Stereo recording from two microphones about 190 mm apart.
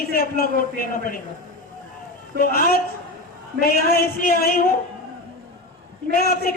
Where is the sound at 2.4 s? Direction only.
50° left (ahead or behind).